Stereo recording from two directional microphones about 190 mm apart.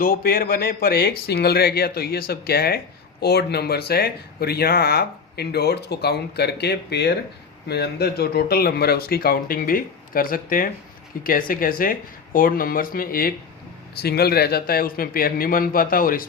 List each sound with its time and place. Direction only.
0.0 s speech: 50° left (ahead or behind)